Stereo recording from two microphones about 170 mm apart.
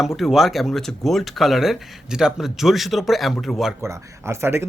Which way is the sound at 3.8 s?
15° right (ahead or behind).